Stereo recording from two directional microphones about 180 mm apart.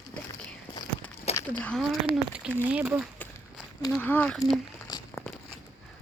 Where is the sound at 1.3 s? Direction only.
35° left (ahead or behind).